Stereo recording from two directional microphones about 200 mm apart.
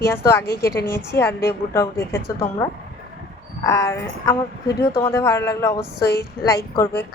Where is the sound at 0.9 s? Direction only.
10° left (ahead or behind).